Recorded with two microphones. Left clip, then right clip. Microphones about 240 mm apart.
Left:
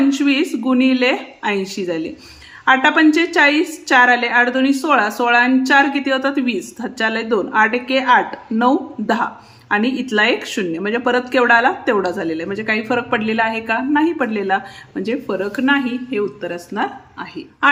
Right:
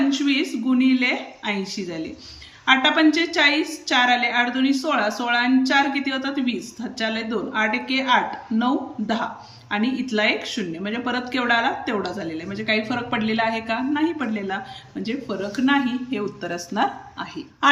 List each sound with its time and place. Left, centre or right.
0.2 s a woman's voice: centre